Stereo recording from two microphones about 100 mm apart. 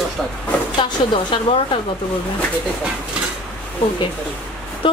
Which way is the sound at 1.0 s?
70° left (ahead or behind).